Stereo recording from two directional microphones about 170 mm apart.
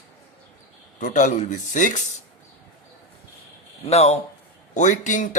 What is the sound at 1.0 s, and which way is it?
Speech, 45° left (ahead or behind).